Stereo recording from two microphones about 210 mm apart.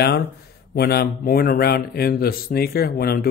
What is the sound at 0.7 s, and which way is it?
Speech, 50° left (ahead or behind).